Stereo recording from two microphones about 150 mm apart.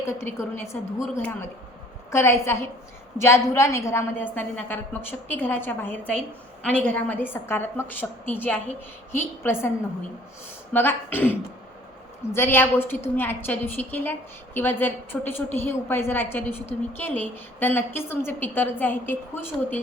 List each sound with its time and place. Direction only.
0.2 s a woman's voice: 15° left (ahead or behind)
10.7 s a woman's voice: 15° left (ahead or behind)